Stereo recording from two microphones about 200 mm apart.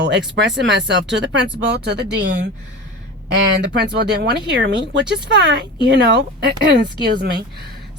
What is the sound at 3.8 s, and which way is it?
A woman's voice, 55° right (ahead or behind).